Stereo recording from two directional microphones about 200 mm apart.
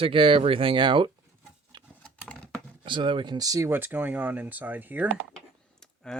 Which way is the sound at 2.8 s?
25° right (ahead or behind).